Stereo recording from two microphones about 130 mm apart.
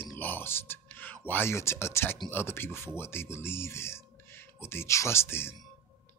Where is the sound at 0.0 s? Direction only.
15° left (ahead or behind).